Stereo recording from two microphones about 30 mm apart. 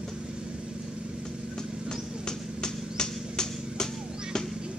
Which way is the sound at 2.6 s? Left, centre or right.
Left.